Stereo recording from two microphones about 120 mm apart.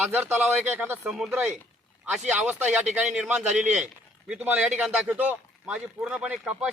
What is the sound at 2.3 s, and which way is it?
Speech, 10° right (ahead or behind).